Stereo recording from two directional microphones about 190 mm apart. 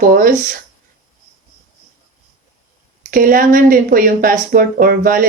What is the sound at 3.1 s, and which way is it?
Speech, 45° right (ahead or behind).